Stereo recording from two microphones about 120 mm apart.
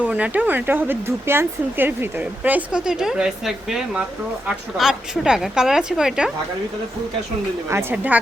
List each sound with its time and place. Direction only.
0.0 s a woman's voice: 10° right (ahead or behind)
7.7 s speech: 20° right (ahead or behind)